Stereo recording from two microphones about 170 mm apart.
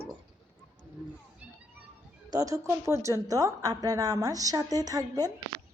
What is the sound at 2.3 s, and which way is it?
A woman's voice, 20° right (ahead or behind).